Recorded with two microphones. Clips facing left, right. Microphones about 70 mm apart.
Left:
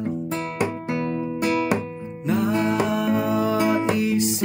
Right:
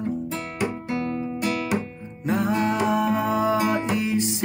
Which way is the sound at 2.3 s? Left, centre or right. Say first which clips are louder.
Left 1 dB; right.